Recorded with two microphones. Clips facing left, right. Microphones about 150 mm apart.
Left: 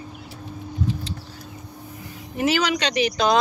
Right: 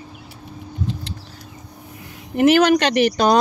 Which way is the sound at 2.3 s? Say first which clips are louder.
Right 8 dB; 55° right (ahead or behind).